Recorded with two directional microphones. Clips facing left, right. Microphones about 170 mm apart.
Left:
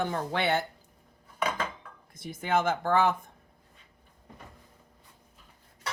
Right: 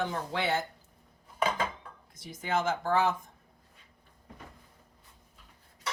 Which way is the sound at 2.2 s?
55° left (ahead or behind).